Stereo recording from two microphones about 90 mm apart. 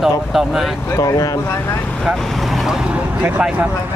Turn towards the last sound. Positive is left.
turn(degrees=-15)  # may be behind; listen again after turning